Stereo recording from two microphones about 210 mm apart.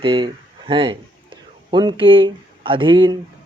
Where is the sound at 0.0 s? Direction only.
25° right (ahead or behind).